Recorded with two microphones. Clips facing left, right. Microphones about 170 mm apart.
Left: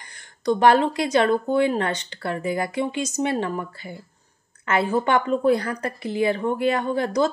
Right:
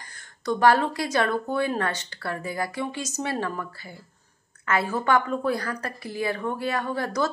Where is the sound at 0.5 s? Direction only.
20° left (ahead or behind).